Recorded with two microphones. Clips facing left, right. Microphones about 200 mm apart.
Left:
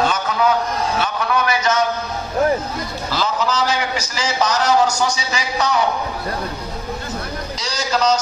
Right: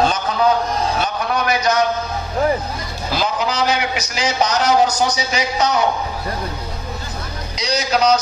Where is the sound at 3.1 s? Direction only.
15° right (ahead or behind).